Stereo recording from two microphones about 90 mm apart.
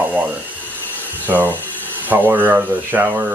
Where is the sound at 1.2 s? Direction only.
20° right (ahead or behind).